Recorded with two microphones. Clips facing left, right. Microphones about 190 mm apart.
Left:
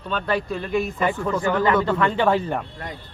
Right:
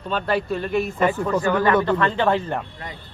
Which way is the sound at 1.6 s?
10° left (ahead or behind).